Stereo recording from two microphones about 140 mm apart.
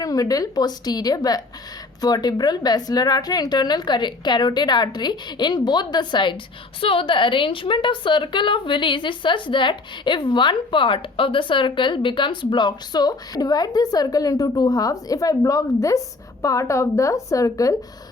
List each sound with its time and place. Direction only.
0.0 s a woman's voice: 25° left (ahead or behind)